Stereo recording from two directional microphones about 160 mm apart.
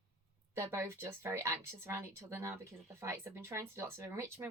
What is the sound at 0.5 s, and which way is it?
Speech, 20° right (ahead or behind).